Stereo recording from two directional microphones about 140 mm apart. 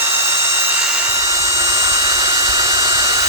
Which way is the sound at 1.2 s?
25° right (ahead or behind).